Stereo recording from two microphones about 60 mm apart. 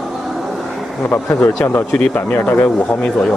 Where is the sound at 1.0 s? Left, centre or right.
Left.